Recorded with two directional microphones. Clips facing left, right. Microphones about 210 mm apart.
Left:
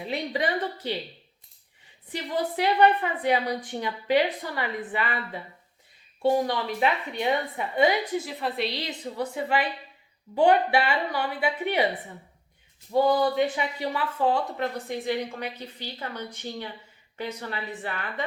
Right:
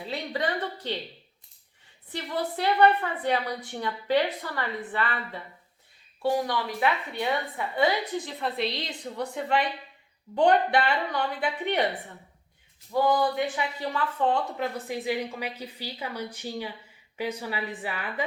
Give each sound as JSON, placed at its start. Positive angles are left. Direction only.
{"t": 0.0, "sound": "a woman's voice", "side_deg": 15}
{"t": 2.1, "sound": "a woman's voice", "side_deg": 15}
{"t": 6.2, "sound": "a woman's voice", "side_deg": 25}
{"t": 8.2, "sound": "a woman's voice", "side_deg": 5}
{"t": 13.1, "sound": "speech", "side_deg": 20}